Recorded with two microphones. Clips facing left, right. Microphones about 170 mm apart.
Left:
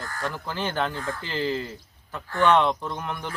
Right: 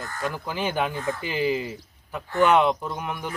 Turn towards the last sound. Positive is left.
turn(degrees=-10)  # may be behind; listen again after turning